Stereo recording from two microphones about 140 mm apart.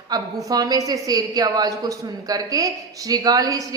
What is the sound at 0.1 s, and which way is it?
A woman's voice, 25° right (ahead or behind).